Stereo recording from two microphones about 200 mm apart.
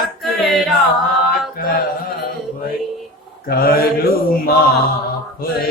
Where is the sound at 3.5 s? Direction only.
50° left (ahead or behind).